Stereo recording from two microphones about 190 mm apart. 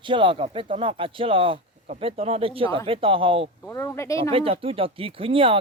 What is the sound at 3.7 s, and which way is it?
Speech, 15° left (ahead or behind).